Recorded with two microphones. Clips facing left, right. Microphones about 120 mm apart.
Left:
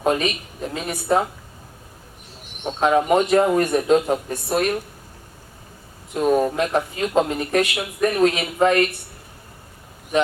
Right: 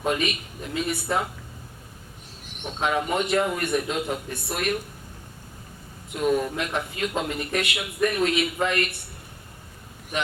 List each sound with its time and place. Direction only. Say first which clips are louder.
0.0 s speech: left 5 dB; 35° left (ahead or behind)
2.6 s speech: left 8 dB; 35° left (ahead or behind)
6.1 s speech: left 5 dB; 40° left (ahead or behind)